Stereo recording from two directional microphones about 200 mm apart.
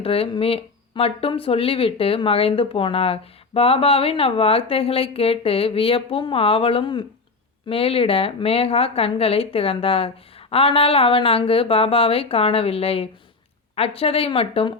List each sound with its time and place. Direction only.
0.0 s speech: 30° left (ahead or behind)